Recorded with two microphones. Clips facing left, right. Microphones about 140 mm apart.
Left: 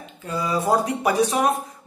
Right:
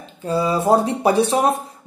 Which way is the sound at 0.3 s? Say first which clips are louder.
Right 5 dB; 30° right (ahead or behind).